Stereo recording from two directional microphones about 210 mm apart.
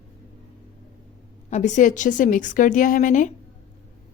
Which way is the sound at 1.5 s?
35° left (ahead or behind).